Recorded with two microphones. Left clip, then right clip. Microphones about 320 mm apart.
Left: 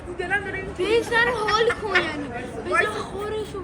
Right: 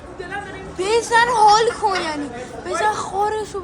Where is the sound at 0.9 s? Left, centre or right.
Centre.